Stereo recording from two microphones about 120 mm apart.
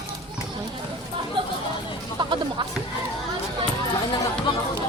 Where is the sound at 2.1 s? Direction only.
40° right (ahead or behind).